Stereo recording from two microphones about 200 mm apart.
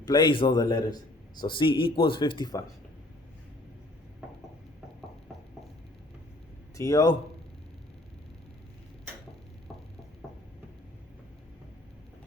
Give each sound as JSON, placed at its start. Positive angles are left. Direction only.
{"t": 0.0, "sound": "a man's voice", "side_deg": 20}
{"t": 6.7, "sound": "a man's voice", "side_deg": 15}